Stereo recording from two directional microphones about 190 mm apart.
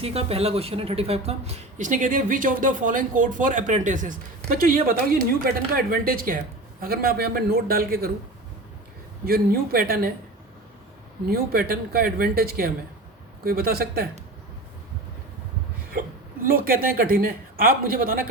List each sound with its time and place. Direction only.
0.0 s speech: 30° right (ahead or behind); by 8.1 s 50° right (ahead or behind)
9.2 s speech: 50° right (ahead or behind)
11.3 s speech: 50° right (ahead or behind)
16.4 s speech: 50° right (ahead or behind)